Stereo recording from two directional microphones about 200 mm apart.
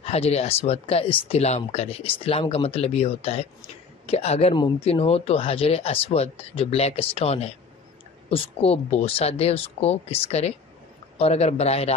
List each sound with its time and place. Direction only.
0.0 s a man's voice: 30° left (ahead or behind)